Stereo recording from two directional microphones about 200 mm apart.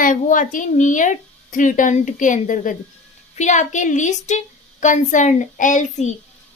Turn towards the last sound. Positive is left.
turn(degrees=40)  # may be behind; listen again after turning